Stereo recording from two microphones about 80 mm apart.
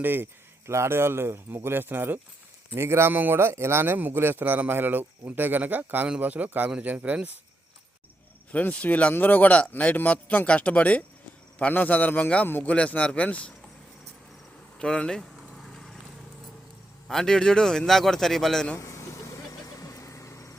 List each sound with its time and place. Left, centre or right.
0.0 s speech: right
8.5 s a man's voice: centre
14.8 s speech: centre
17.1 s a man's voice: centre
18.8 s vehicle: left